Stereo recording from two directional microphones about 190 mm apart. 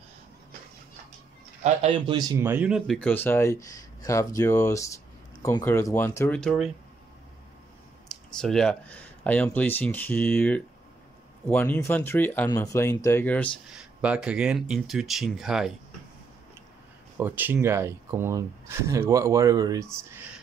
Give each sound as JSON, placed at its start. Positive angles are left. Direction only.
{"t": 1.6, "sound": "a man's voice", "side_deg": -30}
{"t": 2.5, "sound": "speech", "side_deg": -5}
{"t": 8.4, "sound": "speech", "side_deg": 5}
{"t": 13.7, "sound": "speech", "side_deg": -5}
{"t": 17.2, "sound": "speech", "side_deg": -10}